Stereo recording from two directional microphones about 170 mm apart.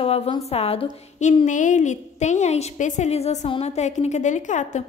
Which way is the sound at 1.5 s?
50° left (ahead or behind).